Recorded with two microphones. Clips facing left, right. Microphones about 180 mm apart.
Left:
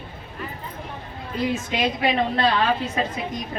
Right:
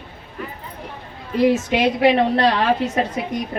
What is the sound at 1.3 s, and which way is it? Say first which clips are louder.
A woman's voice: right 8 dB; 70° right (ahead or behind).